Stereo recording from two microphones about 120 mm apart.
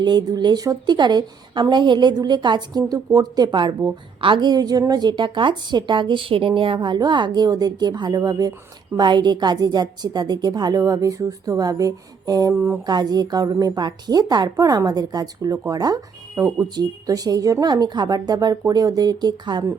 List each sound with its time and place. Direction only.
0.0 s a woman's voice: 40° right (ahead or behind)